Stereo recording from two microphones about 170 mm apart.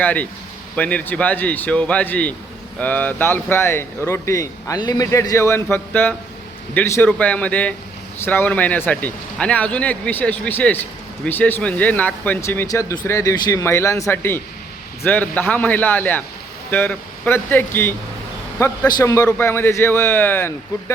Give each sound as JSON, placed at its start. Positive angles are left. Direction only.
{"t": 0.0, "sound": "speech", "side_deg": 10}